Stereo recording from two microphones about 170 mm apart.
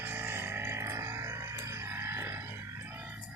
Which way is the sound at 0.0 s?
15° right (ahead or behind).